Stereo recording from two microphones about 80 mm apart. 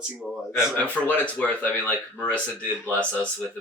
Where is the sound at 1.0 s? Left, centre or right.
Centre.